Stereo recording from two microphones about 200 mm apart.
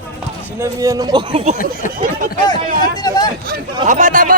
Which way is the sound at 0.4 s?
15° right (ahead or behind).